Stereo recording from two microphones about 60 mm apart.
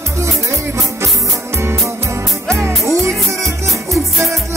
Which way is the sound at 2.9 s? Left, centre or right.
Right.